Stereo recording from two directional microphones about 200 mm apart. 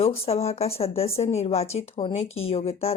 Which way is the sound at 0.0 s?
30° left (ahead or behind).